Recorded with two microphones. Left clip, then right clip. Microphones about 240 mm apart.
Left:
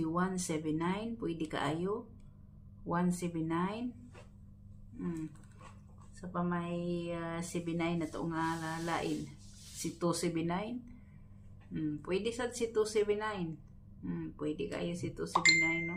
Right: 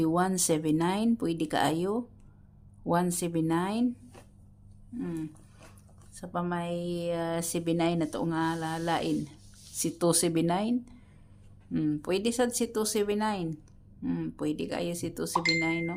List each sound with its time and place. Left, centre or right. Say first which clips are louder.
0.0 s speech: right 8 dB; right
6.1 s speech: right 5 dB; right